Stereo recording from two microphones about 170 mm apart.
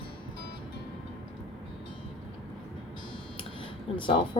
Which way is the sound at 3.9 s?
30° left (ahead or behind).